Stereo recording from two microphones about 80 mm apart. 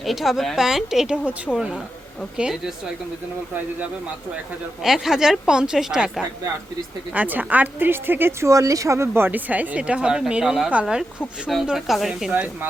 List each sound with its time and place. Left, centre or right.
0.0 s a woman's voice: centre
4.8 s a woman's voice: centre
7.1 s a woman's voice: right; by 12.3 s centre